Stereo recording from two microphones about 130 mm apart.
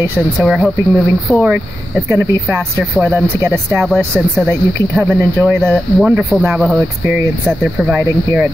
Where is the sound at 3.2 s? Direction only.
20° right (ahead or behind).